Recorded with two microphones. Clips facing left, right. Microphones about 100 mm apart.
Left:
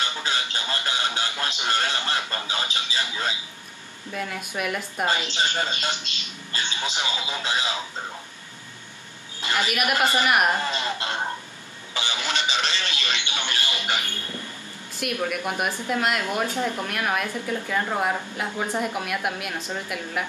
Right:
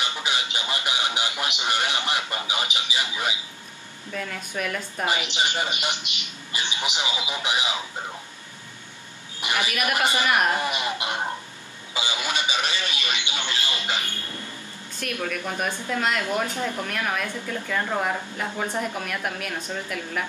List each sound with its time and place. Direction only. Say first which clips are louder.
0.0 s speech: even; 15° right (ahead or behind)
4.1 s speech: left 1 dB; 10° left (ahead or behind)
5.0 s a man's voice: even; 15° right (ahead or behind)
9.4 s a man's voice: left 1 dB; 15° right (ahead or behind)
13.7 s speech: left 1 dB; 20° left (ahead or behind)